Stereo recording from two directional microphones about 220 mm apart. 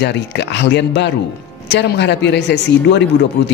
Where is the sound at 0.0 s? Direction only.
50° left (ahead or behind).